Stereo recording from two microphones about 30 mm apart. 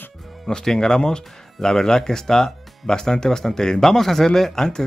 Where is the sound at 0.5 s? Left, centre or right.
Centre.